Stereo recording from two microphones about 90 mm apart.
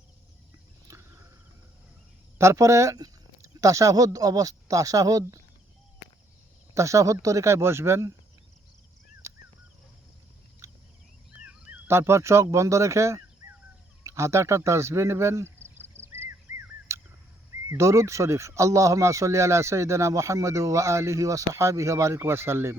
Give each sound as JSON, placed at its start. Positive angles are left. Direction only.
{"t": 2.4, "sound": "speech", "side_deg": -35}
{"t": 6.7, "sound": "speech", "side_deg": -35}
{"t": 11.3, "sound": "a sound", "side_deg": -15}
{"t": 11.9, "sound": "speech", "side_deg": -30}
{"t": 16.0, "sound": "a sound", "side_deg": -25}
{"t": 17.7, "sound": "speech", "side_deg": -35}